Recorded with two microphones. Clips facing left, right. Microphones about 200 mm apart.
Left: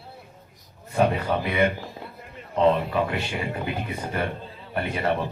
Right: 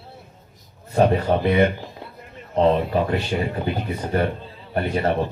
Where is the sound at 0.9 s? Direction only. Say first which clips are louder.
Right 4 dB; 40° right (ahead or behind).